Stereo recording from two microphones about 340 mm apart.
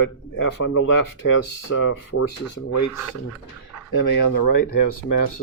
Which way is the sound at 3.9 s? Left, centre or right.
Left.